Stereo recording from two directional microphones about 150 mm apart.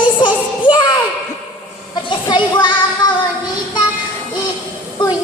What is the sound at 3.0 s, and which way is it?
Child singing, 25° left (ahead or behind).